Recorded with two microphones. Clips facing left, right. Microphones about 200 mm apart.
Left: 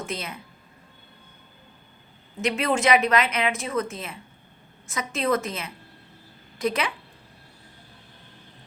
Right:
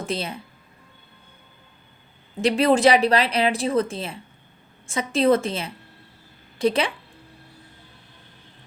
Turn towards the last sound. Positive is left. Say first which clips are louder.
# right 5 dB
turn(degrees=-30)  # may be behind; listen again after turning